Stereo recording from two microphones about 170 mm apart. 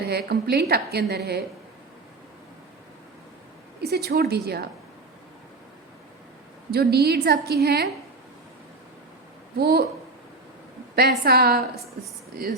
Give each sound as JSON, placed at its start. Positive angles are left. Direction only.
{"t": 0.0, "sound": "a woman's voice", "side_deg": -70}
{"t": 3.8, "sound": "a woman's voice", "side_deg": -70}
{"t": 6.7, "sound": "a woman's voice", "side_deg": -65}
{"t": 9.6, "sound": "a woman's voice", "side_deg": -65}
{"t": 10.9, "sound": "a woman's voice", "side_deg": -65}